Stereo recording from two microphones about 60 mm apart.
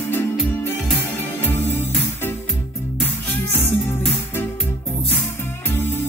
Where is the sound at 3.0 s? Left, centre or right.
Left.